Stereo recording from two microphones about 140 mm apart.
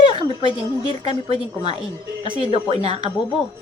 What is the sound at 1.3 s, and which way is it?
Speech, 45° right (ahead or behind).